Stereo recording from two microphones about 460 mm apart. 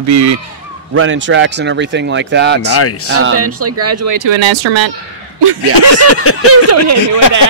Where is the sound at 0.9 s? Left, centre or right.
Right.